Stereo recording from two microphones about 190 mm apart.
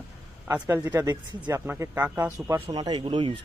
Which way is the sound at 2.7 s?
25° right (ahead or behind).